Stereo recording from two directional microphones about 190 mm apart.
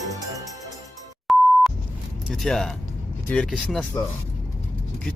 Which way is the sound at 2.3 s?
Centre (ahead or behind).